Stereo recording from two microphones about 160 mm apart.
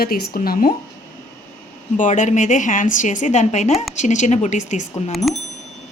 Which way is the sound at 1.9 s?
50° left (ahead or behind).